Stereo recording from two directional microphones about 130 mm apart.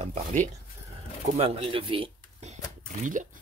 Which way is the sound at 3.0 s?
85° right.